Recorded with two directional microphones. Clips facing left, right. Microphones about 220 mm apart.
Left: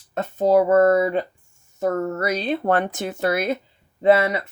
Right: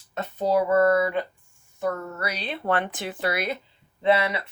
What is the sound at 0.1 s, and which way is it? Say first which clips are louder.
Speech: left 6 dB; 50° left (ahead or behind).